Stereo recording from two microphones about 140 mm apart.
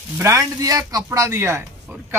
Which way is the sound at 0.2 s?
20° right (ahead or behind).